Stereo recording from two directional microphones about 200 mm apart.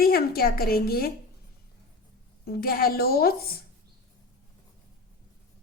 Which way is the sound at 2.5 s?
50° left (ahead or behind).